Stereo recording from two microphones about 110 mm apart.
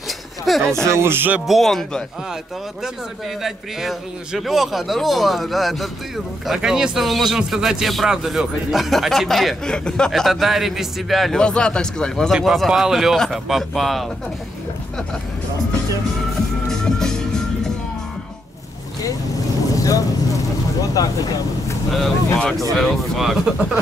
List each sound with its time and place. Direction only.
0.5 s speech: 5° left (ahead or behind)
0.8 s speech: 25° right (ahead or behind)
1.5 s speech: centre (ahead or behind)
3.4 s speech: centre (ahead or behind)
16.6 s music: 5° left (ahead or behind)
19.7 s vehicle: 30° left (ahead or behind)
20.9 s speech: 35° left (ahead or behind)
21.9 s speech: 5° left (ahead or behind)